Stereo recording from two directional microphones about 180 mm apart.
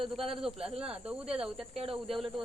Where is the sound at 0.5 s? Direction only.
30° right (ahead or behind).